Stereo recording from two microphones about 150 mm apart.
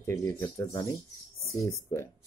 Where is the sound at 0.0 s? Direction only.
20° left (ahead or behind).